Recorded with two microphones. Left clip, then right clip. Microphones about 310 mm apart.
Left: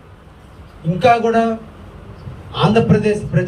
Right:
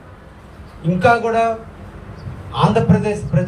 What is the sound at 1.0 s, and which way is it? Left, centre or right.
Speech, right.